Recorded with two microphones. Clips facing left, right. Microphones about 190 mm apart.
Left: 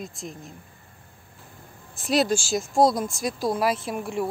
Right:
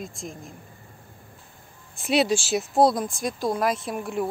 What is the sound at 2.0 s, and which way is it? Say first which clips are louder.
A woman's voice: even; centre (ahead or behind).